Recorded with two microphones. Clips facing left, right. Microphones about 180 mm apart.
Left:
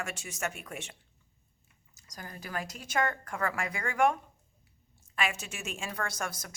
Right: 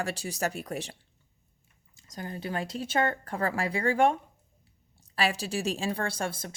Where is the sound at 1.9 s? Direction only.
25° right (ahead or behind).